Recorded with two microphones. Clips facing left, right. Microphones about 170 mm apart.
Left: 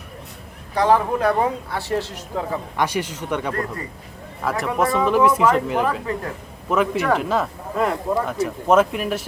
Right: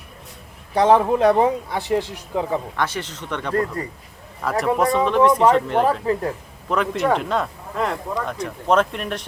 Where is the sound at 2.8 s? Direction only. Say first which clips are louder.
Left 3 dB; 10° left (ahead or behind).